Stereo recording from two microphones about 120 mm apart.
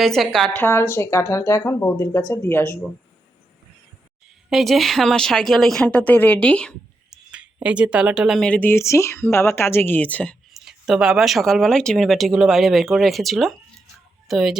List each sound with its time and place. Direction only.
0.0 s speech: centre (ahead or behind)
0.5 s speech: 20° left (ahead or behind)
4.4 s speech: centre (ahead or behind)
7.1 s a sound: 10° right (ahead or behind)
8.4 s speech: 10° left (ahead or behind)
8.7 s speech: 25° left (ahead or behind)
10.5 s speech: 5° right (ahead or behind)